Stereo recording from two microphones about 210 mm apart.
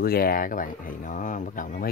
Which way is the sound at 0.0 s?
45° left (ahead or behind).